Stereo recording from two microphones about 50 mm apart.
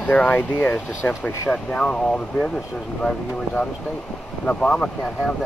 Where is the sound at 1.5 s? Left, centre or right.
Centre.